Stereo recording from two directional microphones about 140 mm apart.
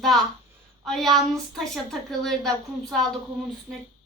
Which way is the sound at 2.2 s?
5° left (ahead or behind).